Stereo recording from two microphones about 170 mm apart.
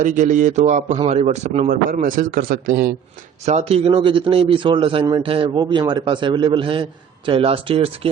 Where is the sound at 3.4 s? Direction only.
35° right (ahead or behind).